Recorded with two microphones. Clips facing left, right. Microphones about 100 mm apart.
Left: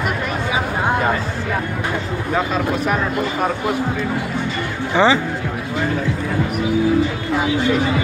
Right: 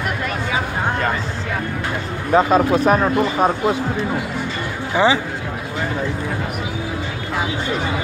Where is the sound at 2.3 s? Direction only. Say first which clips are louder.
Right 6 dB; 30° right (ahead or behind).